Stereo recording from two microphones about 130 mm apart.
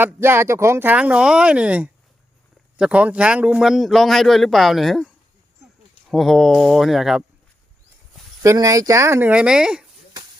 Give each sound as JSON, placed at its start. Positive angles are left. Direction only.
{"t": 0.0, "sound": "a man's voice", "side_deg": -20}
{"t": 8.4, "sound": "speech", "side_deg": -25}
{"t": 9.3, "sound": "speech", "side_deg": -5}